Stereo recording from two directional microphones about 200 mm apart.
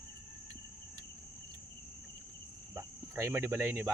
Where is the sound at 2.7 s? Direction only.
15° right (ahead or behind).